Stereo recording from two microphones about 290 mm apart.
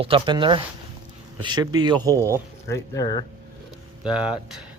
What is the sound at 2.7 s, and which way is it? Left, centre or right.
Speech, centre.